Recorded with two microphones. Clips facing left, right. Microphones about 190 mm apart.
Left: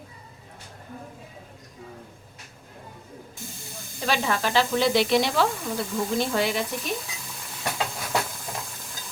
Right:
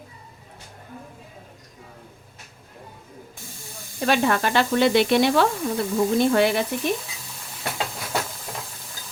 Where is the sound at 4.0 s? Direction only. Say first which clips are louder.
Right 5 dB; 55° right (ahead or behind).